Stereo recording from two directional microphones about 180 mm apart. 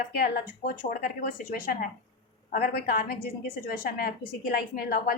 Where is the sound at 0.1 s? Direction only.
55° left (ahead or behind).